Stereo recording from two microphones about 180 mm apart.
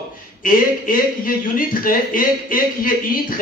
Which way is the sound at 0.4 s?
50° left (ahead or behind).